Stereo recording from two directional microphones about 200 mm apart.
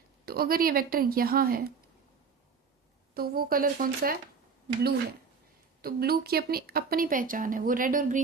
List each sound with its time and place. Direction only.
0.3 s speech: 50° right (ahead or behind)
3.2 s speech: 50° right (ahead or behind)
5.8 s speech: 50° right (ahead or behind)